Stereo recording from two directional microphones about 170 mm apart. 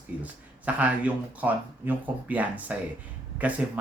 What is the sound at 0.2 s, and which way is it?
Speech, 10° right (ahead or behind).